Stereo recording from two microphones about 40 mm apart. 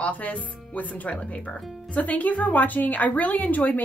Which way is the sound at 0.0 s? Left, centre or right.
Left.